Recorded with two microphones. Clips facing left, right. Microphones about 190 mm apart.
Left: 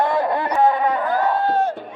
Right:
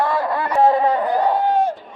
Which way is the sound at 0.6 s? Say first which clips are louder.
Right 3 dB; 30° right (ahead or behind).